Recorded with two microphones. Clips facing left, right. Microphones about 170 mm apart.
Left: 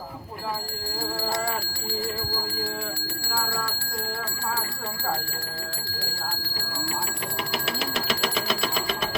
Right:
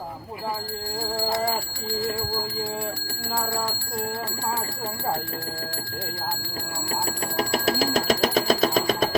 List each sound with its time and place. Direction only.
7.3 s alarm clock: 40° right (ahead or behind)